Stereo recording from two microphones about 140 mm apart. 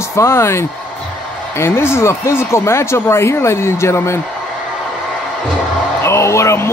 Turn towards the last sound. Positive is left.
turn(degrees=20)  # may be behind; listen again after turning